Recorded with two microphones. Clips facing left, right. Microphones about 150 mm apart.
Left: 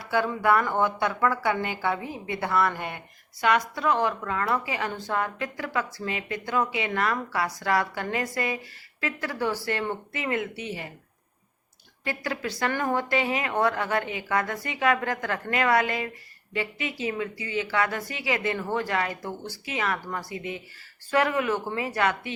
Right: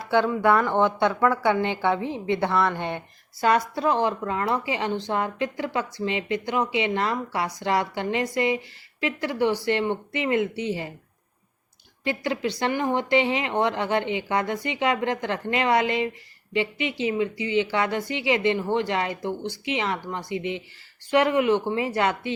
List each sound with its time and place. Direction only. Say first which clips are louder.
0.0 s a woman's voice: right 4 dB; 20° right (ahead or behind)
2.5 s speech: left 2 dB; 5° left (ahead or behind)
2.7 s a woman's voice: right 5 dB; 25° right (ahead or behind)
12.0 s a woman's voice: right 5 dB; 25° right (ahead or behind)